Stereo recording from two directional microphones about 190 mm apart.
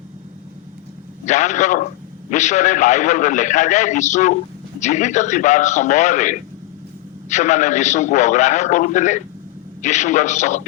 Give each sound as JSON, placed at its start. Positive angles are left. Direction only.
{"t": 1.2, "sound": "a man's voice", "side_deg": 40}